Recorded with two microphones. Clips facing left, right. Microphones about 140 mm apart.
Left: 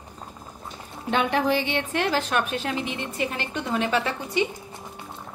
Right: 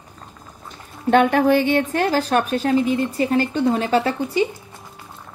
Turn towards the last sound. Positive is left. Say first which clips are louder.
# right 6 dB
turn(degrees=-35)  # may be behind; listen again after turning